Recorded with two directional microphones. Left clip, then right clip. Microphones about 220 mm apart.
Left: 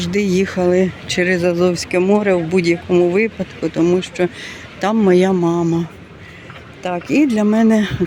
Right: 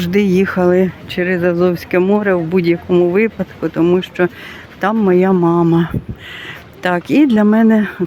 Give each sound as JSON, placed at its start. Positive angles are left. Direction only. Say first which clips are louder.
{"t": 0.0, "sound": "speech", "louder": "right 3 dB", "side_deg": -20}